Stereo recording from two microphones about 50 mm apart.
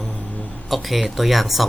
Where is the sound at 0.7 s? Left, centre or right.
Centre.